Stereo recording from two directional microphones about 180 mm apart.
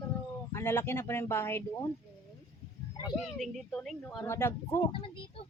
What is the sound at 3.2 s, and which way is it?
Speech, centre (ahead or behind).